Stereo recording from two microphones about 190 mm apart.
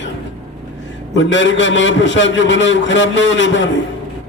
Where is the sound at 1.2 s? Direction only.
75° left (ahead or behind).